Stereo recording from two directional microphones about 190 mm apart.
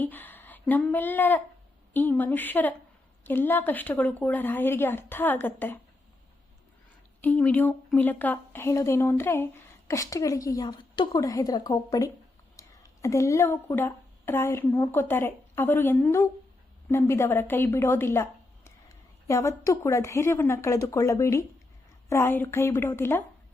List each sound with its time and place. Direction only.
0.0 s a woman's voice: 10° left (ahead or behind)
7.2 s a woman's voice: 10° left (ahead or behind)